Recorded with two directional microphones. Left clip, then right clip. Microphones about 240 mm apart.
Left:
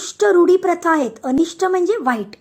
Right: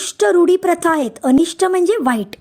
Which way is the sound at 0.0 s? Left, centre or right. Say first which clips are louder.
Even; right.